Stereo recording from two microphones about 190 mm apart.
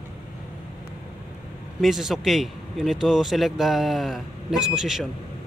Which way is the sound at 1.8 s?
Centre (ahead or behind).